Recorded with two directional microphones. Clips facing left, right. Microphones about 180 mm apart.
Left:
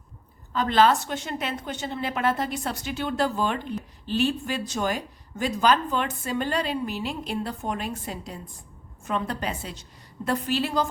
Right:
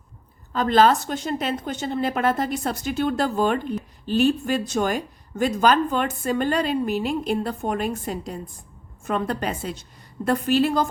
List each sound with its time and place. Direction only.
0.5 s a woman's voice: 45° right (ahead or behind)